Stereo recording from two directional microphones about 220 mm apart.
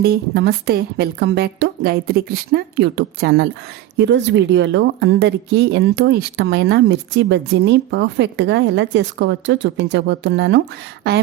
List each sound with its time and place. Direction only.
0.0 s a woman's voice: 45° right (ahead or behind)